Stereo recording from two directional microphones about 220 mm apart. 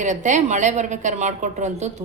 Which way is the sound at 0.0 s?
35° right (ahead or behind).